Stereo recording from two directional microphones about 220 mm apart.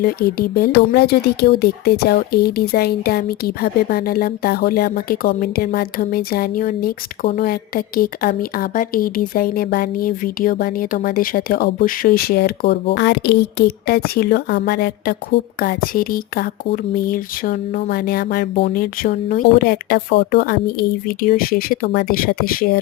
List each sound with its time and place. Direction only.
0.0 s speech: 45° left (ahead or behind)